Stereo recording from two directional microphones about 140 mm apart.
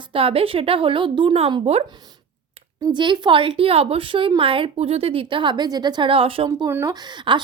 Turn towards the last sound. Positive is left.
turn(degrees=-35)  # may be behind; listen again after turning